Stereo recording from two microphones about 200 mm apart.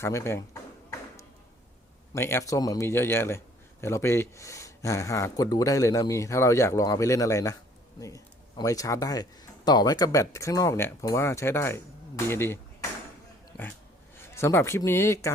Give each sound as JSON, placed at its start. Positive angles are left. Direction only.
{"t": 0.0, "sound": "a sound", "side_deg": 15}
{"t": 2.1, "sound": "a man's voice", "side_deg": 15}
{"t": 14.2, "sound": "speech", "side_deg": 15}